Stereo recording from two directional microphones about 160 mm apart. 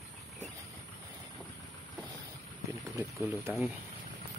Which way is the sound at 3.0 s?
15° right (ahead or behind).